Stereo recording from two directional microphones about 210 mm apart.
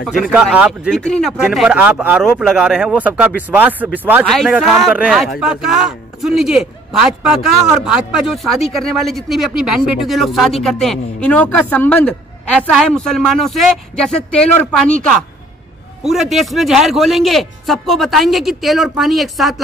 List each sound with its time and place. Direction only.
0.3 s a man's voice: 5° right (ahead or behind)